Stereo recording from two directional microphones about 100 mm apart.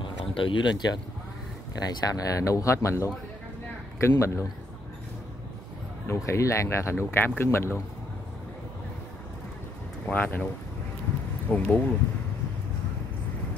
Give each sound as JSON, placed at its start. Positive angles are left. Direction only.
{"t": 0.0, "sound": "speech", "side_deg": 60}
{"t": 4.2, "sound": "speech", "side_deg": 30}
{"t": 6.0, "sound": "speech", "side_deg": 30}
{"t": 10.0, "sound": "speech", "side_deg": 15}
{"t": 11.5, "sound": "speech", "side_deg": 15}